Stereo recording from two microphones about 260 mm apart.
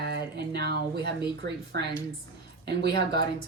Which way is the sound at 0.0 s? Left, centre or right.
Right.